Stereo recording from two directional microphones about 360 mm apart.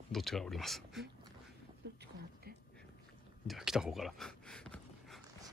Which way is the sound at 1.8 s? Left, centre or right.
Right.